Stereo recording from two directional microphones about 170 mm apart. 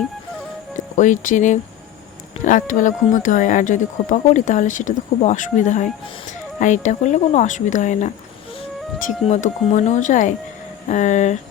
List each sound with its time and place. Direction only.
0.9 s speech: 45° left (ahead or behind)